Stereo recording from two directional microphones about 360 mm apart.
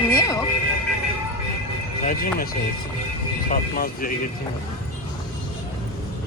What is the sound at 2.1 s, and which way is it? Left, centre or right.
Speech, left.